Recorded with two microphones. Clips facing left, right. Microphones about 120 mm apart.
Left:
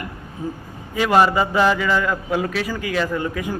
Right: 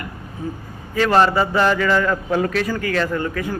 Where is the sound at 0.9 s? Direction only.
10° left (ahead or behind).